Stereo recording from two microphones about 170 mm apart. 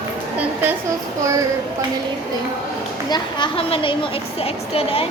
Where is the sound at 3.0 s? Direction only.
25° left (ahead or behind).